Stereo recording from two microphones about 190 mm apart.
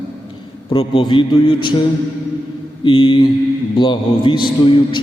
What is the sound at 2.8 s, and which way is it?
A man's voice, 25° left (ahead or behind).